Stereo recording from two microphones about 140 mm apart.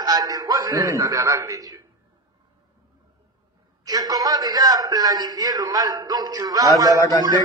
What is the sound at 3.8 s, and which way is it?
A man's voice, 25° right (ahead or behind).